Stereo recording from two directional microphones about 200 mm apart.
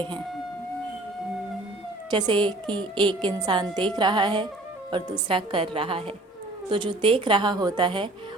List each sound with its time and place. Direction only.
2.0 s a woman's voice: 20° right (ahead or behind)